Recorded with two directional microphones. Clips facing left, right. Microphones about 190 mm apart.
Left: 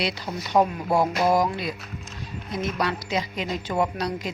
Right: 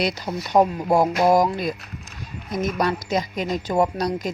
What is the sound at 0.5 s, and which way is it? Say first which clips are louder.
Speech: right 3 dB; 40° right (ahead or behind).